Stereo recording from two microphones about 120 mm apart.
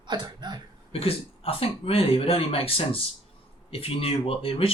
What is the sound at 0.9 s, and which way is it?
Speech, 55° left (ahead or behind).